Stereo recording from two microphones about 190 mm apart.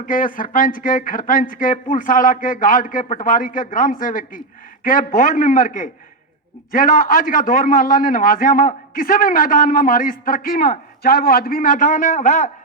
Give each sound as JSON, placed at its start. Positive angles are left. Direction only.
{"t": 0.0, "sound": "speech", "side_deg": 45}